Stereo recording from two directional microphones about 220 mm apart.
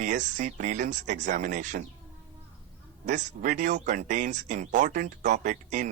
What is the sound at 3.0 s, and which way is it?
Speech, 35° right (ahead or behind).